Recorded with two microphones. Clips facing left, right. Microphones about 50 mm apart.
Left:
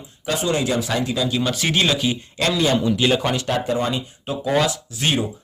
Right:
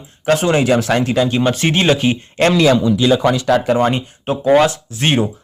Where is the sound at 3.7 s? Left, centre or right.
Right.